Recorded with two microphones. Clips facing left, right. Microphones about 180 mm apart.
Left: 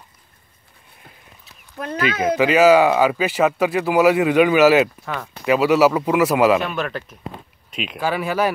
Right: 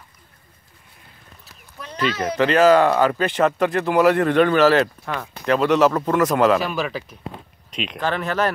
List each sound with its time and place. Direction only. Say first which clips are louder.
1.8 s speech: left 9 dB; 60° left (ahead or behind)
2.3 s speech: left 1 dB; 5° left (ahead or behind)